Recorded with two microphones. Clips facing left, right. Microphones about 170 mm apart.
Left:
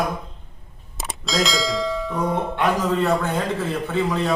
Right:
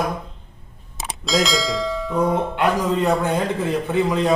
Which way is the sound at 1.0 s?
Centre (ahead or behind).